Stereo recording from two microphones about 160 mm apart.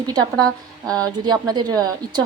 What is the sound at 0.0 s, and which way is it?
A woman's voice, 25° right (ahead or behind).